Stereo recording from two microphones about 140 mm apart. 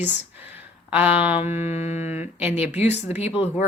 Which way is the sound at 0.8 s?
10° right (ahead or behind).